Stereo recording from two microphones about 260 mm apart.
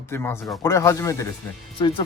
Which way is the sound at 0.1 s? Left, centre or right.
Centre.